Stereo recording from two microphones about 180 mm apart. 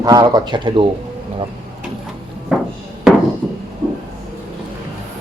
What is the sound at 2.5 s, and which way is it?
Music, centre (ahead or behind).